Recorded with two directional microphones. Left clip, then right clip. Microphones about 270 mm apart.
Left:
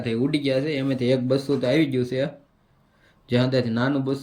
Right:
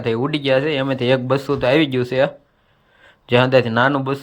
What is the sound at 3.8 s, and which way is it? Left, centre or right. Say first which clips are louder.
Speech: right 8 dB; centre.